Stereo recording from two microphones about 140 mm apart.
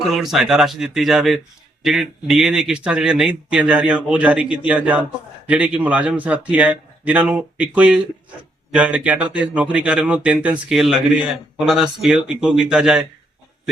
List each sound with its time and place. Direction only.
0.1 s speech: centre (ahead or behind)